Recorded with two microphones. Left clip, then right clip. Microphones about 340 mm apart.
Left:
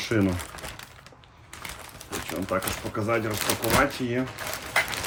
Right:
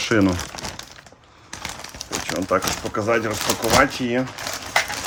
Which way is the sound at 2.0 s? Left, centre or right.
Right.